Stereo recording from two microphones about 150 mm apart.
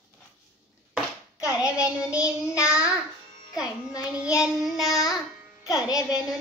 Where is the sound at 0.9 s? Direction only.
5° right (ahead or behind).